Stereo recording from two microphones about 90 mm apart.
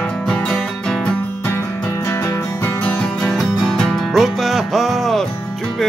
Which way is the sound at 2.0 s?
30° left (ahead or behind).